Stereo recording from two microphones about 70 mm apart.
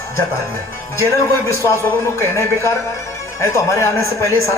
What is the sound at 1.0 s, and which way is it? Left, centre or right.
A man's voice, left.